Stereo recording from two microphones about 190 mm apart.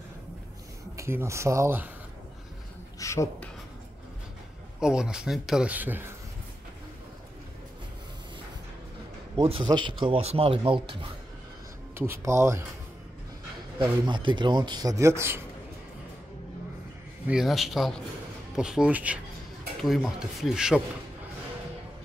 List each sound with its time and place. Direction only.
0.9 s speech: 15° right (ahead or behind)
3.0 s writing: 15° left (ahead or behind)
4.7 s a man's voice: 5° right (ahead or behind)
9.4 s speech: 30° right (ahead or behind)
11.9 s speech: 15° right (ahead or behind)
14.0 s speech: 25° right (ahead or behind)
17.3 s a man's voice: centre (ahead or behind)